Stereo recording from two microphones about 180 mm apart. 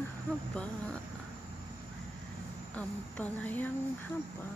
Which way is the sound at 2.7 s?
5° left (ahead or behind).